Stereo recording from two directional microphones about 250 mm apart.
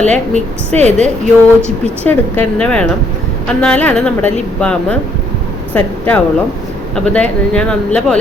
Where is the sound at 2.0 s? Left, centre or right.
Centre.